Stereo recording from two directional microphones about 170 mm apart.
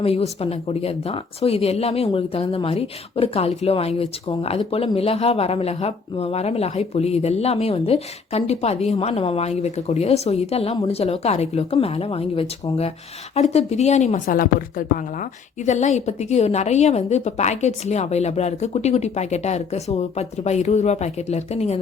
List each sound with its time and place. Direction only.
0.0 s speech: 35° left (ahead or behind)
13.5 s speech: 40° left (ahead or behind)
14.3 s speech: 55° left (ahead or behind)